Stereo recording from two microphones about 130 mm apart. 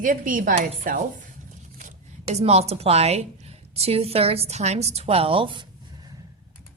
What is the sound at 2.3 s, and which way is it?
A woman's voice, 55° right (ahead or behind).